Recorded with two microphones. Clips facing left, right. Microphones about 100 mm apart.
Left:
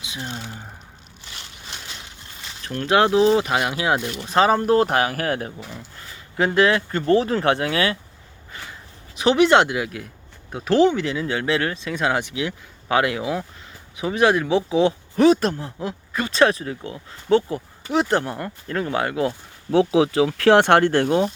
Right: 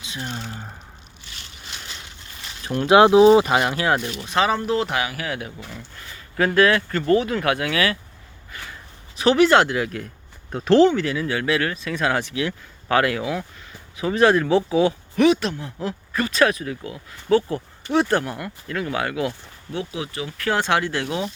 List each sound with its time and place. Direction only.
0.2 s speech: 5° left (ahead or behind)
2.6 s speech: 15° right (ahead or behind)
3.5 s speech: 5° left (ahead or behind)
4.3 s speech: 35° left (ahead or behind)
5.7 s speech: 20° left (ahead or behind)
9.1 s speech: 20° left (ahead or behind); by 15.7 s 40° left (ahead or behind)
15.8 s speech: 20° left (ahead or behind)
16.3 s speech: 30° left (ahead or behind)
17.5 s speech: 15° left (ahead or behind)
18.2 s speech: 30° left (ahead or behind)
19.7 s speech: 90° left; by 21.3 s 45° left (ahead or behind)